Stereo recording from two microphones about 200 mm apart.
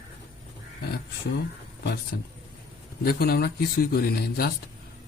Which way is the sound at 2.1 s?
55° left (ahead or behind).